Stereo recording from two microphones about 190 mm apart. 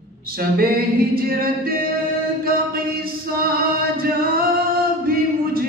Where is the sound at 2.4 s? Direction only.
50° right (ahead or behind).